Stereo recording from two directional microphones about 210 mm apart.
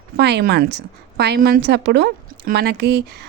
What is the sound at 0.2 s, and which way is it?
A woman's voice, 50° right (ahead or behind).